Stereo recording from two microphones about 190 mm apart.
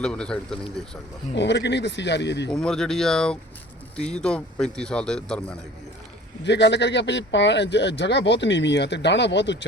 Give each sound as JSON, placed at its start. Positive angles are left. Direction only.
{"t": 0.0, "sound": "speech", "side_deg": 5}
{"t": 1.4, "sound": "speech", "side_deg": 65}
{"t": 2.5, "sound": "speech", "side_deg": 5}
{"t": 6.4, "sound": "speech", "side_deg": 65}